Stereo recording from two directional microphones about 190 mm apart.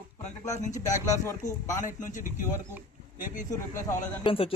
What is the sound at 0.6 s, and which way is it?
Speech, 40° left (ahead or behind).